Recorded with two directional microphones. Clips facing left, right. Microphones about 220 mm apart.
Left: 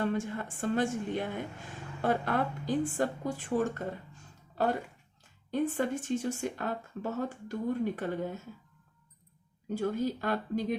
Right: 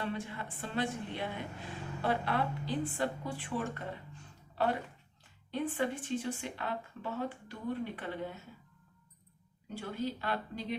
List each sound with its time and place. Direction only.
0.0 s a woman's voice: 45° left (ahead or behind)
9.7 s a woman's voice: 45° left (ahead or behind)